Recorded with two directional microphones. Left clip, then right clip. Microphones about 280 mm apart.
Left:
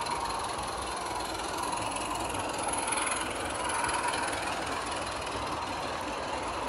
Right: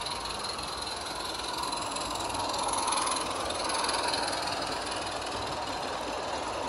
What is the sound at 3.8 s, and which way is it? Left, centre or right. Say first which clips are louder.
Engine: even; right.